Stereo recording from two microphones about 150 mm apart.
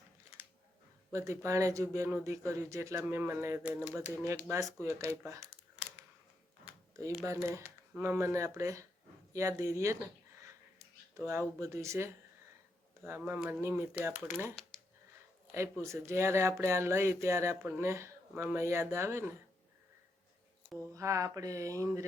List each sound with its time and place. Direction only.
1.1 s speech: 20° right (ahead or behind)
7.3 s speech: 20° right (ahead or behind)
15.8 s speech: 20° right (ahead or behind)
20.9 s speech: 20° right (ahead or behind)